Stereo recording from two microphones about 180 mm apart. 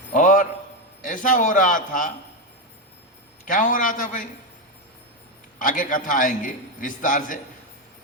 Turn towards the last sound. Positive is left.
turn(degrees=45)  # may be behind; listen again after turning